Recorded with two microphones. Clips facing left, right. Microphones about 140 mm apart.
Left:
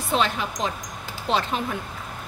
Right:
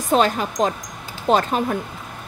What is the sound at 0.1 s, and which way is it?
Speech, 45° right (ahead or behind).